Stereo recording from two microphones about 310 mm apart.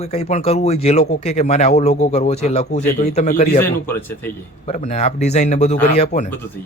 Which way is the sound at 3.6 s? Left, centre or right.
Centre.